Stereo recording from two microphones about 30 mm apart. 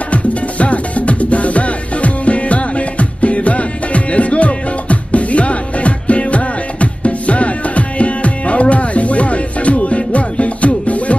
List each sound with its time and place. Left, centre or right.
0.1 s music: left